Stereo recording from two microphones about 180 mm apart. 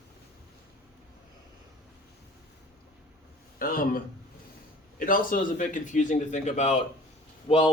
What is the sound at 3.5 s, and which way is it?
Speech, 55° left (ahead or behind).